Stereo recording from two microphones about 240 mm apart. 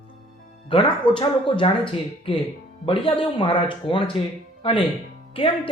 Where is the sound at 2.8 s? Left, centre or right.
Left.